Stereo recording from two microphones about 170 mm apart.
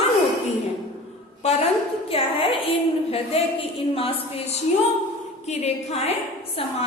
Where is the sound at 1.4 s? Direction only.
40° left (ahead or behind).